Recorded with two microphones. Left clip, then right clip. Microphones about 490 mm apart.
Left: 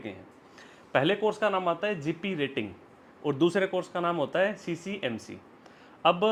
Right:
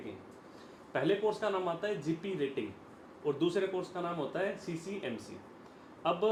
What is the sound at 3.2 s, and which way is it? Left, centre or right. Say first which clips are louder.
Speech: left 6 dB; left.